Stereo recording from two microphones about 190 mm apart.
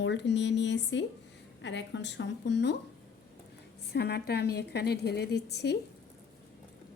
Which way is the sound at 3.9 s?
60° left (ahead or behind).